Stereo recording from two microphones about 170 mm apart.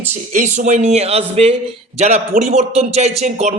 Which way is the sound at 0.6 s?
45° right (ahead or behind).